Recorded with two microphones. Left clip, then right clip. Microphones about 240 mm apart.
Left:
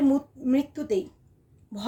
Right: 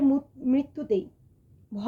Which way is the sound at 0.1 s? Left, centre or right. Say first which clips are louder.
Left 1 dB; centre.